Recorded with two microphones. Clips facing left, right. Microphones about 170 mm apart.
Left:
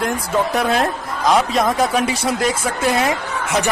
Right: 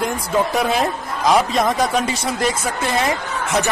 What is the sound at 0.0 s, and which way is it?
Speech, centre (ahead or behind).